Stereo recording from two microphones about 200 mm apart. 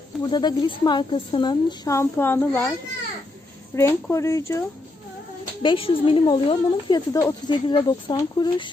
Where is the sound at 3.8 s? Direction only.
15° left (ahead or behind).